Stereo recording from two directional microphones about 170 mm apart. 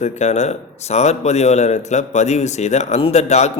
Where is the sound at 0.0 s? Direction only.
40° left (ahead or behind).